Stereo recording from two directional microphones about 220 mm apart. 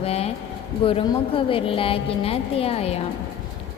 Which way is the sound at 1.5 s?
25° left (ahead or behind).